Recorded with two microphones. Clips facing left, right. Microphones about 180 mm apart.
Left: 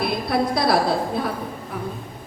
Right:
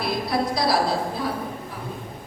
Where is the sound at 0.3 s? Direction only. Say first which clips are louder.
Left 3 dB; 60° left (ahead or behind).